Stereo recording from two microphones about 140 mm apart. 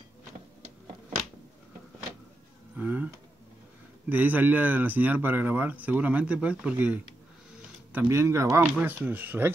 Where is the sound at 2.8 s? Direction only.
10° right (ahead or behind).